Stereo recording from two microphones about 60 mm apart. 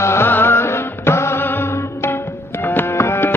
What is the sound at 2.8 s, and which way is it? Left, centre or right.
Music, left.